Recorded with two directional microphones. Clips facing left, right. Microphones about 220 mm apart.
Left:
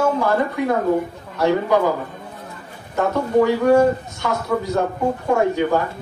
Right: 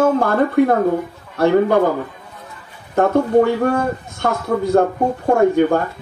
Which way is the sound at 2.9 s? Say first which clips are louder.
Right 4 dB; 55° right (ahead or behind).